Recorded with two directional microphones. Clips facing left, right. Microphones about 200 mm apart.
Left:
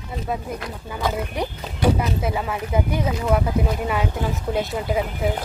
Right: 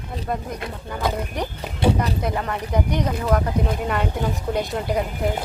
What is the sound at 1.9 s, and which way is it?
Speech, 5° left (ahead or behind).